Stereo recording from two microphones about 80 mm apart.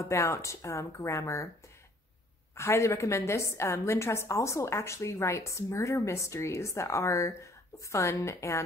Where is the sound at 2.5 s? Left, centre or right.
Left.